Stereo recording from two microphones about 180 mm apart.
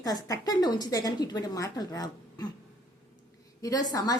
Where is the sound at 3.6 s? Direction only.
20° left (ahead or behind).